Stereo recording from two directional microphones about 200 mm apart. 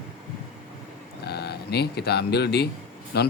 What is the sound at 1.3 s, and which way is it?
Speech, 55° left (ahead or behind).